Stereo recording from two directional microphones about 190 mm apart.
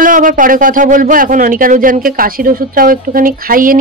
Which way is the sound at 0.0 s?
45° right (ahead or behind).